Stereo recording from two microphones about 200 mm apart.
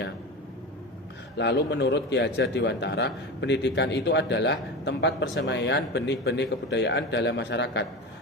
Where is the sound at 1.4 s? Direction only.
60° left (ahead or behind).